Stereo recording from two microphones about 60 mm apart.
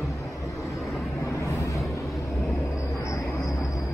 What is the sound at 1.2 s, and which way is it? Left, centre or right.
Vehicle, left.